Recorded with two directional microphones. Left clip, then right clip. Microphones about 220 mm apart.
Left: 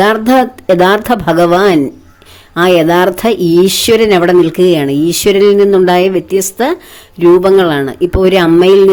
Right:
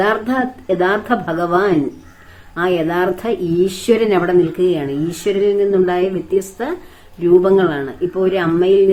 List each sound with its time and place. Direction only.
0.0 s speech: 50° left (ahead or behind)